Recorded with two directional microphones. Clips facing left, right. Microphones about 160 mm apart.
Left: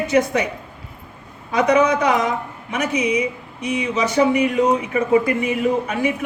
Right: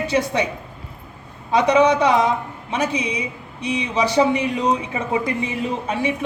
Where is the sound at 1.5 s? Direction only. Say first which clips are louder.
Right 1 dB; 30° right (ahead or behind).